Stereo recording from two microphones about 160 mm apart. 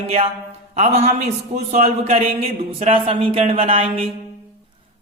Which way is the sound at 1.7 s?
40° right (ahead or behind).